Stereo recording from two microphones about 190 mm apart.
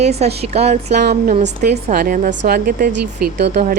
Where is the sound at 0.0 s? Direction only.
35° right (ahead or behind).